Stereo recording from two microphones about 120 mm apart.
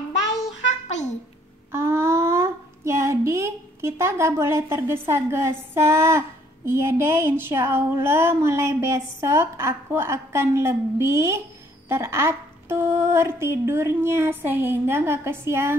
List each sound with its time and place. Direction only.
0.8 s babbling: 75° left (ahead or behind)
1.7 s speech: 20° right (ahead or behind)
11.9 s a sound: 25° right (ahead or behind)